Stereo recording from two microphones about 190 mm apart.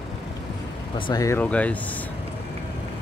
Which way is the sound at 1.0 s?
20° left (ahead or behind).